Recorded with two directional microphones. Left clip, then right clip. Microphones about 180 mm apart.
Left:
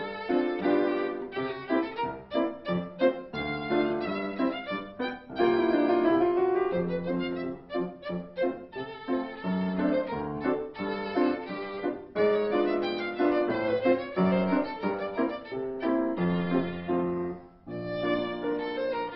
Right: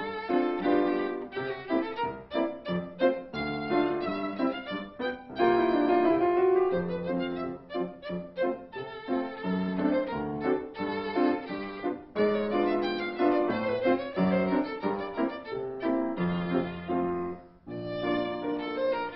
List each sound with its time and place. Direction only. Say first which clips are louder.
0.5 s music: even; centre (ahead or behind)
5.9 s music: even; 15° left (ahead or behind)
6.7 s music: even; centre (ahead or behind)
9.1 s violin: even; centre (ahead or behind)
12.2 s music: left 2 dB; centre (ahead or behind)
13.3 s violin: left 1 dB; centre (ahead or behind)
15.8 s music: left 2 dB; centre (ahead or behind)
17.8 s violin: left 1 dB; centre (ahead or behind)